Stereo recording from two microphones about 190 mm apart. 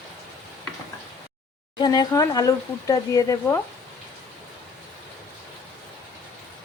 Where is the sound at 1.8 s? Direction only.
20° left (ahead or behind).